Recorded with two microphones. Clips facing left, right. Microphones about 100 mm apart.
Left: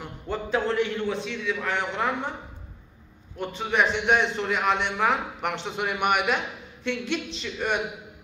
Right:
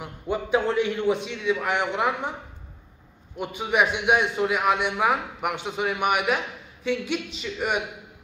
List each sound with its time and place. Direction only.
0.0 s a man's voice: 10° right (ahead or behind)
3.3 s a man's voice: 10° right (ahead or behind)